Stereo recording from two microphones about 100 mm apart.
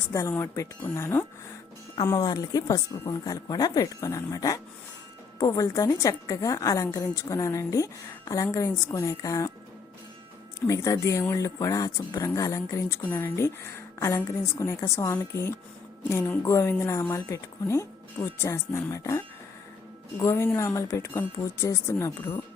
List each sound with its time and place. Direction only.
0.1 s a woman's voice: 30° left (ahead or behind)
2.0 s speech: 40° left (ahead or behind)
10.7 s speech: 35° left (ahead or behind)
13.0 s a woman's voice: 20° left (ahead or behind)